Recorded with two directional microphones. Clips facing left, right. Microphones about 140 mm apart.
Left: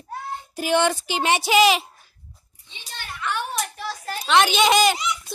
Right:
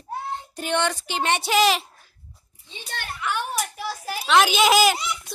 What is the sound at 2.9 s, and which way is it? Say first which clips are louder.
Speech: right 4 dB; 65° right (ahead or behind).